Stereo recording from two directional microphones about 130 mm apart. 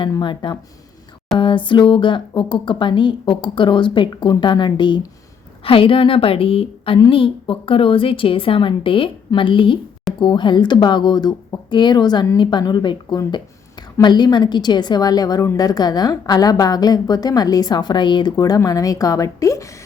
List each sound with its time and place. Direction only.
0.2 s a woman's voice: 40° left (ahead or behind)